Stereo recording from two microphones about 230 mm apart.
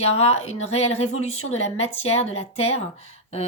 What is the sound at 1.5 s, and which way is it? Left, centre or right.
Speech, left.